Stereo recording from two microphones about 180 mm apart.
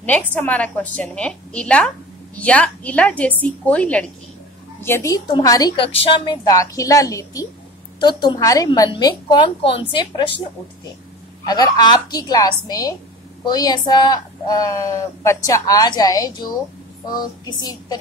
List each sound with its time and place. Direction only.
0.3 s a woman's voice: 10° left (ahead or behind); by 10.3 s 25° left (ahead or behind)
11.4 s speech: 20° left (ahead or behind)